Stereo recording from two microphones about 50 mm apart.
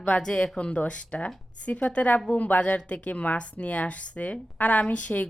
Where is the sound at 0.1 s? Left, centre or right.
Centre.